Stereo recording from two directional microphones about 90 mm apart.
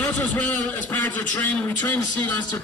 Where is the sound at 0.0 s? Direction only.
15° left (ahead or behind).